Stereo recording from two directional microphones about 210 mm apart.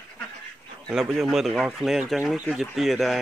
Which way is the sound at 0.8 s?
Centre (ahead or behind).